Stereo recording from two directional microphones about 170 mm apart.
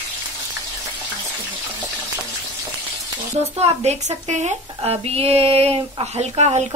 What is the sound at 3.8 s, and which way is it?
A woman's voice, 45° right (ahead or behind).